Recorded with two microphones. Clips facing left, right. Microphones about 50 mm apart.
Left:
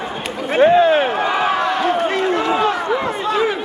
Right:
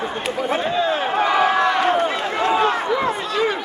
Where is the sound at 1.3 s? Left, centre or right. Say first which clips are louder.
Right 1 dB; centre.